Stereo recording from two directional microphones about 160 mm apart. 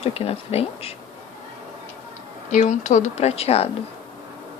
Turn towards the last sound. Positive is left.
turn(degrees=40)  # may be behind; listen again after turning